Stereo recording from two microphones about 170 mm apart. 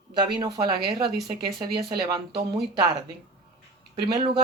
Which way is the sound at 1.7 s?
25° right (ahead or behind).